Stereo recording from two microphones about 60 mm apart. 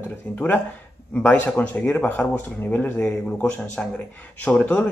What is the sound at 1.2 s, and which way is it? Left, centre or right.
Speech, left.